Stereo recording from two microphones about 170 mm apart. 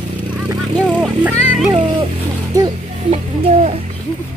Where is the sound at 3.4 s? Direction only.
35° right (ahead or behind).